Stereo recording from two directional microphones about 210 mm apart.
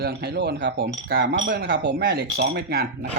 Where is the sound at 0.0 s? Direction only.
50° right (ahead or behind).